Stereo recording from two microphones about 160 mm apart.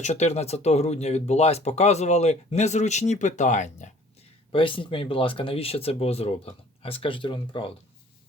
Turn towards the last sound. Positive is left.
turn(degrees=30)  # may be behind; listen again after turning